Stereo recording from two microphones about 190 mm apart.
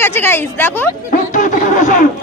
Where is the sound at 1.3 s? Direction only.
40° left (ahead or behind).